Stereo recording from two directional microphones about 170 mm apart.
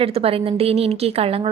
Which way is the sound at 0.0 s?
35° right (ahead or behind).